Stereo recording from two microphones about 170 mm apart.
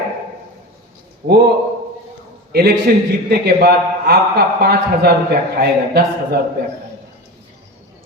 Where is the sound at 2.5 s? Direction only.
65° right (ahead or behind).